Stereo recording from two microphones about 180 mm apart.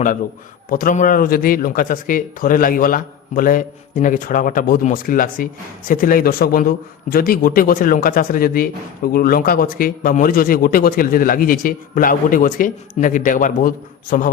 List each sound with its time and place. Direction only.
0.7 s speech: 50° left (ahead or behind)